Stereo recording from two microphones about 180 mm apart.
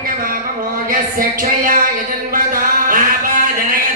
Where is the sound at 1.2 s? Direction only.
50° right (ahead or behind).